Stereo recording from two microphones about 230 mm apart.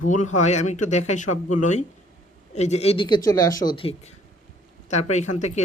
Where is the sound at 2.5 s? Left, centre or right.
Left.